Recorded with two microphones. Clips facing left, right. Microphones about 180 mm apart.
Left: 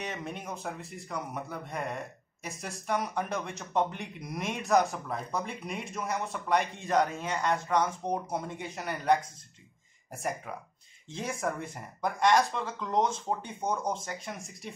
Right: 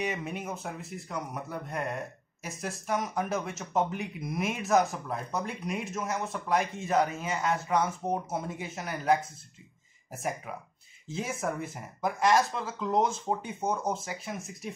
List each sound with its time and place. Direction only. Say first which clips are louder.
0.0 s speech: right 4 dB; 5° right (ahead or behind)